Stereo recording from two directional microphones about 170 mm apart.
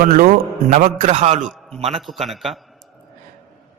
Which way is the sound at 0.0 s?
60° right (ahead or behind).